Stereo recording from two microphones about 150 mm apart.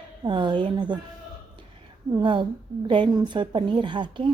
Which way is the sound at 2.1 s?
30° right (ahead or behind).